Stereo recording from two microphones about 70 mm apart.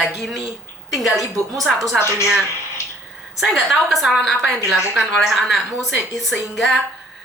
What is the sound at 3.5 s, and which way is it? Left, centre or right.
A woman's voice, centre.